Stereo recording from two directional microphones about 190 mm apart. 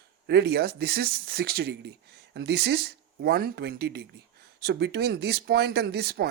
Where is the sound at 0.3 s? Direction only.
55° right (ahead or behind).